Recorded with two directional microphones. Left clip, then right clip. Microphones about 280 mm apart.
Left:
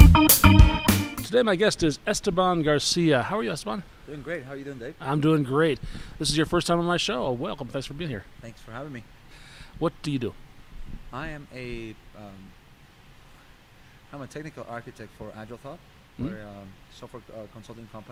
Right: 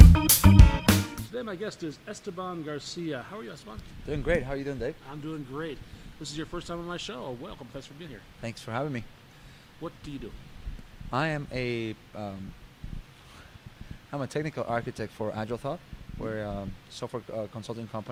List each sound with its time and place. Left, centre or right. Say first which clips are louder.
0.0 s music: left 6 dB; centre
1.3 s speech: left 18 dB; left
4.1 s speech: right 6 dB; right
5.5 s speech: left 14 dB; left
8.4 s speech: right 6 dB; right
9.8 s speech: left 12 dB; left
11.1 s speech: right 7 dB; right
14.1 s speech: right 6 dB; right